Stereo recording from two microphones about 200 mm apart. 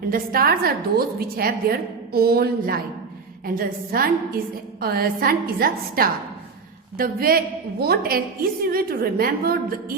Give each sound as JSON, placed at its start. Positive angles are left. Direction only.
{"t": 0.1, "sound": "a woman's voice", "side_deg": -45}